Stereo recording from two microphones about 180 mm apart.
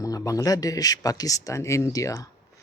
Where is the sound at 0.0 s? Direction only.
20° left (ahead or behind).